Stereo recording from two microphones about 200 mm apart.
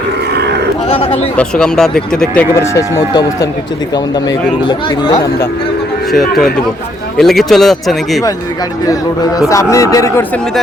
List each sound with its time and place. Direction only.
0.9 s bird: 25° left (ahead or behind)
1.4 s speech: 5° left (ahead or behind)
4.7 s speech: 20° left (ahead or behind)
7.2 s speech: centre (ahead or behind)
9.5 s speech: 15° left (ahead or behind)